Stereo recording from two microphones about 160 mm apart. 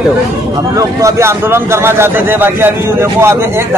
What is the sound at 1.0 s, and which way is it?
A man's voice, 15° right (ahead or behind).